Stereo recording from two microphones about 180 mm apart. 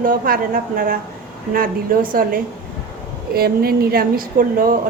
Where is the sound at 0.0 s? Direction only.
50° right (ahead or behind).